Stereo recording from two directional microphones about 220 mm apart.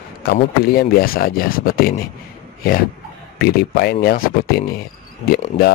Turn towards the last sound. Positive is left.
turn(degrees=25)  # may be behind; listen again after turning